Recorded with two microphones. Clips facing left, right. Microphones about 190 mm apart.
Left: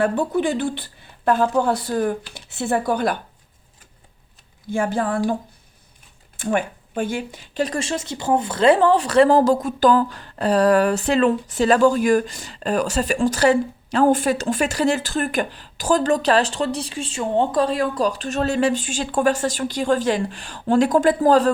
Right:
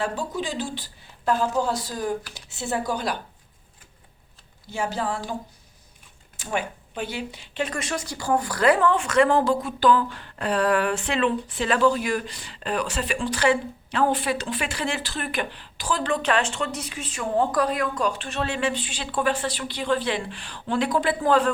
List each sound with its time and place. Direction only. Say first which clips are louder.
0.0 s a woman's voice: left 8 dB; 60° left (ahead or behind)
4.7 s speech: left 6 dB; 50° left (ahead or behind)
6.3 s speech: left 6 dB; 55° left (ahead or behind)